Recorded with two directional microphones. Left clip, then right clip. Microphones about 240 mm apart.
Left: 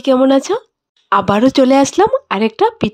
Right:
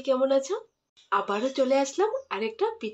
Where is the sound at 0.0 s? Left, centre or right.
Left.